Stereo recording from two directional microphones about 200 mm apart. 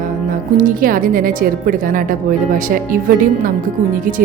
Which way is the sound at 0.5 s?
45° right (ahead or behind).